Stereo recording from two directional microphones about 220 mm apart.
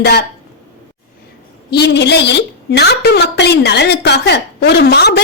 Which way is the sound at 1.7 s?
50° left (ahead or behind).